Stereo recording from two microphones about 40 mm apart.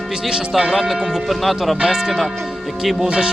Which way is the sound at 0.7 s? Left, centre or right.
Centre.